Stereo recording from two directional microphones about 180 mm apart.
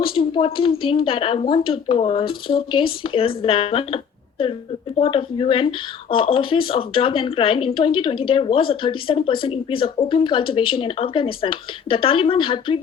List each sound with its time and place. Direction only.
0.0 s a woman's voice: 30° left (ahead or behind)